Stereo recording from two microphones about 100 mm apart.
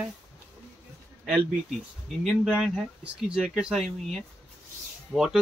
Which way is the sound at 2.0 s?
Centre (ahead or behind).